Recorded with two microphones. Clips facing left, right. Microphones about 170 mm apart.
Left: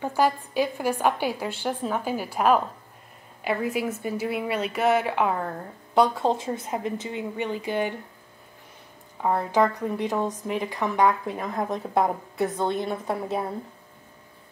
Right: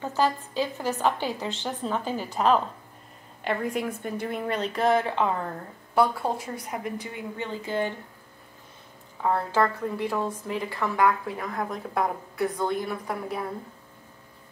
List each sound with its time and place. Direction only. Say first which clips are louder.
0.0 s a woman's voice: left 2 dB; 10° left (ahead or behind)
5.9 s a woman's voice: left 3 dB; 20° left (ahead or behind)
9.2 s a woman's voice: left 2 dB; 15° left (ahead or behind)